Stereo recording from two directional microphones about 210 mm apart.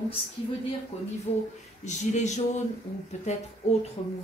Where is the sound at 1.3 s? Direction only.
30° left (ahead or behind).